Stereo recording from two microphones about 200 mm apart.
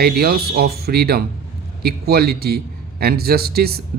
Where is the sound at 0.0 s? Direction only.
50° right (ahead or behind).